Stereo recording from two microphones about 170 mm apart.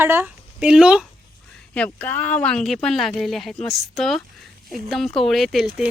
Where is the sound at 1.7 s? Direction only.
10° left (ahead or behind).